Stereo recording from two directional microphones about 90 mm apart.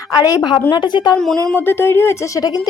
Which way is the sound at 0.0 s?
45° left (ahead or behind).